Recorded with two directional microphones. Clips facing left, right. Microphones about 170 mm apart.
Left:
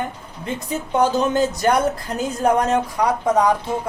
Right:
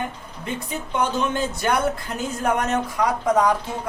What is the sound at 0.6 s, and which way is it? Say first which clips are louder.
Speech: left 6 dB; 40° left (ahead or behind).